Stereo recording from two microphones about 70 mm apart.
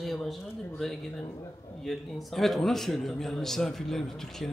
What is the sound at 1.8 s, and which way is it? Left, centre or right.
A man's voice, centre.